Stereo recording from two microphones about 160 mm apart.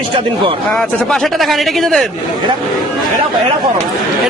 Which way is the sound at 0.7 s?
Centre (ahead or behind).